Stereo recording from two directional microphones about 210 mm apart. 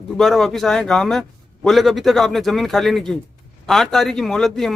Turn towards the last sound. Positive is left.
turn(degrees=0)  # may be behind; listen again after turning